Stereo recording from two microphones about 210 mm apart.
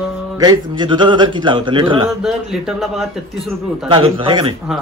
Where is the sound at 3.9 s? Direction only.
25° right (ahead or behind).